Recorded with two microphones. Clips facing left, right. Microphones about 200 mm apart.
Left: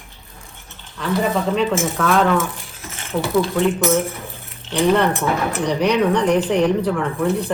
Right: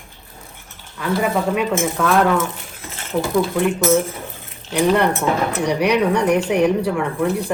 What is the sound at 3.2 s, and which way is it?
Speech, centre (ahead or behind).